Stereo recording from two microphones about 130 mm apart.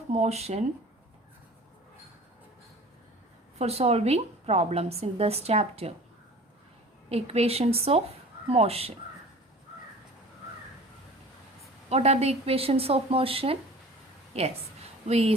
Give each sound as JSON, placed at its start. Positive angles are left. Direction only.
{"t": 0.1, "sound": "speech", "side_deg": -55}
{"t": 3.6, "sound": "a woman's voice", "side_deg": -50}
{"t": 7.1, "sound": "a woman's voice", "side_deg": -50}
{"t": 11.9, "sound": "a woman's voice", "side_deg": -55}
{"t": 15.0, "sound": "a woman's voice", "side_deg": -50}